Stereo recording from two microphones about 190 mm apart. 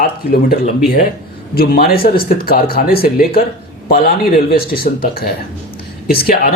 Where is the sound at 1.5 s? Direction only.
50° left (ahead or behind).